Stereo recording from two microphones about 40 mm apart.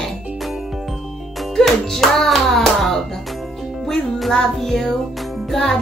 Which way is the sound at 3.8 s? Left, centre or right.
Centre.